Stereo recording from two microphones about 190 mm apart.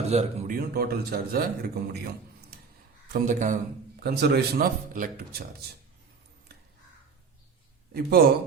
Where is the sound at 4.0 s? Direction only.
60° right (ahead or behind).